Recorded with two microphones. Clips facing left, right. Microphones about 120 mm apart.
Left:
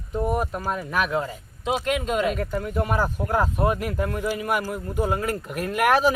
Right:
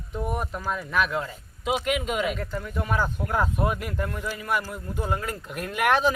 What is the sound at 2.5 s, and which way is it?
Speech, 45° left (ahead or behind).